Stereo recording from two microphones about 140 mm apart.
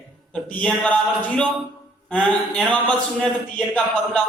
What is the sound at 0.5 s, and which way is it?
Speech, 10° left (ahead or behind).